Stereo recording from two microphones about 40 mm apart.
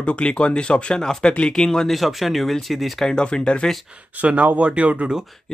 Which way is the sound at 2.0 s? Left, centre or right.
Centre.